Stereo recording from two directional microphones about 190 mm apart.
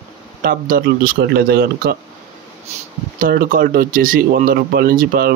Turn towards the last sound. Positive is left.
turn(degrees=-50)  # may be behind; listen again after turning